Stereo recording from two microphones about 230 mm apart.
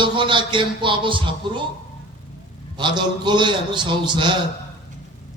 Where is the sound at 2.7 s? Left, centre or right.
Centre.